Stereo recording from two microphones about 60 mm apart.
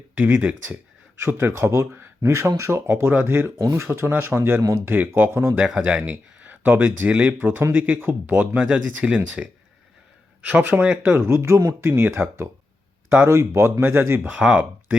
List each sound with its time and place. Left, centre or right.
0.2 s speech: right
5.7 s speech: right
13.2 s speech: right
14.5 s speech: right